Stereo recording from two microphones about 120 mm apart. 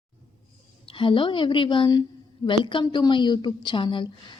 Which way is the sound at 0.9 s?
45° left (ahead or behind).